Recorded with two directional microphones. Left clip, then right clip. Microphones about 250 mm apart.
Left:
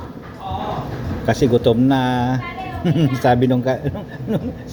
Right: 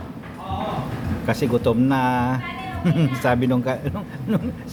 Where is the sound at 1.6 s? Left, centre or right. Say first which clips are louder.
Left 3 dB; centre.